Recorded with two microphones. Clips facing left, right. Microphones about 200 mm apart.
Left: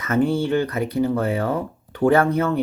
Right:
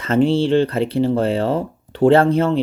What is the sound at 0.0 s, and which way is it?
Speech, 30° right (ahead or behind).